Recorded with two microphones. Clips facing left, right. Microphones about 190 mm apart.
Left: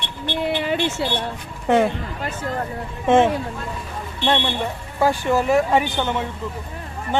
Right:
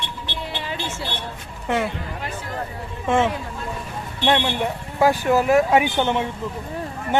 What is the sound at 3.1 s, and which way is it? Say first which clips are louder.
Speech: left 4 dB; 20° left (ahead or behind).